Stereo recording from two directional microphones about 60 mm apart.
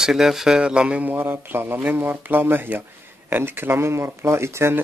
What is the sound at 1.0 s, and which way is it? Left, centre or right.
Speech, right.